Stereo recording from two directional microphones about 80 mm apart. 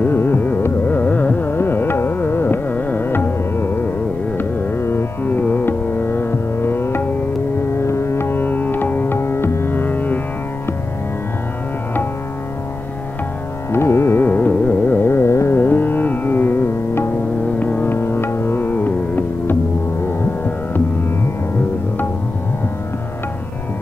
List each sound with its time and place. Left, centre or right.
0.0 s carnatic music: left
4.4 s music: left
13.7 s carnatic music: left
17.6 s music: left